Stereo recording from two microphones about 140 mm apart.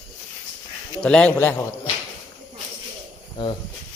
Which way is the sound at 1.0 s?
5° left (ahead or behind).